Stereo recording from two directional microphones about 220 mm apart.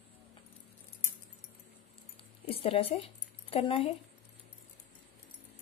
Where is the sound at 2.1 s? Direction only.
25° left (ahead or behind).